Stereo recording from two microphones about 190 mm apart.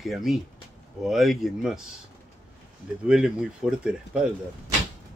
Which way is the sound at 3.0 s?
5° right (ahead or behind).